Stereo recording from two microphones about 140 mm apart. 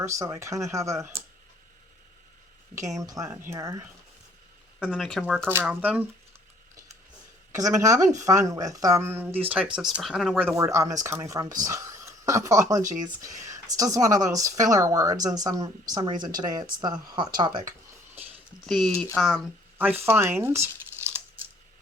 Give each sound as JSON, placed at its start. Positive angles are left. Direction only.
{"t": 0.0, "sound": "speech", "side_deg": -20}
{"t": 2.7, "sound": "speech", "side_deg": -25}
{"t": 4.9, "sound": "speech", "side_deg": 5}
{"t": 5.6, "sound": "speech", "side_deg": -10}
{"t": 7.5, "sound": "speech", "side_deg": -25}
{"t": 9.7, "sound": "speech", "side_deg": -5}
{"t": 10.3, "sound": "speech", "side_deg": -15}
{"t": 18.2, "sound": "a sound", "side_deg": -45}
{"t": 18.6, "sound": "speech", "side_deg": 5}
{"t": 19.8, "sound": "crumpling", "side_deg": -15}